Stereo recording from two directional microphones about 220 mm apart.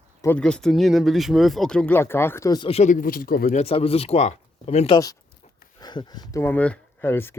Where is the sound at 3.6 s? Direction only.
25° left (ahead or behind).